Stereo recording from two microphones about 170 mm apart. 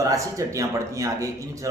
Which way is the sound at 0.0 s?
20° right (ahead or behind).